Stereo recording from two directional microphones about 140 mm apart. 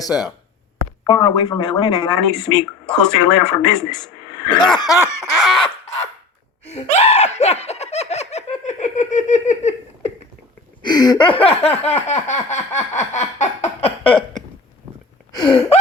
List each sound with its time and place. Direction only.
0.0 s laughter: 25° left (ahead or behind)
1.0 s speech: 30° left (ahead or behind)
4.7 s laughter: 30° left (ahead or behind)
5.4 s chicken: centre (ahead or behind)
6.7 s laughter: 50° left (ahead or behind)
10.8 s a sound: 30° left (ahead or behind)